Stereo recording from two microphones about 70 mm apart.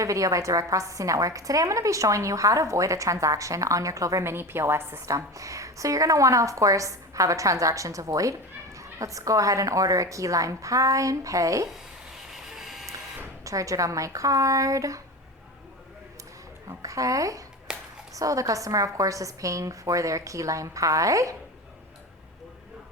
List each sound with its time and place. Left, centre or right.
0.0 s speech: right
4.2 s a woman's voice: right
5.0 s speech: right
12.3 s printer: centre
13.4 s speech: right
16.6 s speech: right
17.7 s a sound: centre
18.1 s speech: right